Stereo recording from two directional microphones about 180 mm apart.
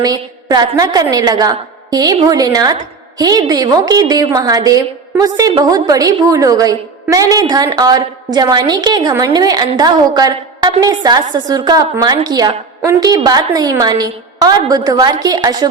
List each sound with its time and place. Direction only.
0.0 s a woman's voice: 20° right (ahead or behind)